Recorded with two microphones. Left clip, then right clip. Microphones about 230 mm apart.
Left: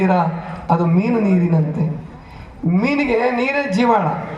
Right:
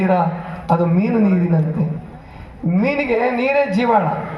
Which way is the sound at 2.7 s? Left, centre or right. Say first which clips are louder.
Even; left.